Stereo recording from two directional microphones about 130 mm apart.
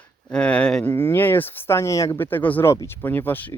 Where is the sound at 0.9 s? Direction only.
15° left (ahead or behind).